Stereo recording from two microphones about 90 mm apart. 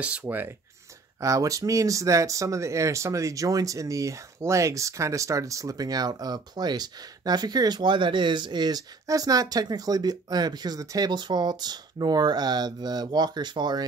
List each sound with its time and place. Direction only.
0.3 s speech: 10° right (ahead or behind)
1.2 s speech: 40° right (ahead or behind)
11.1 s speech: 55° right (ahead or behind)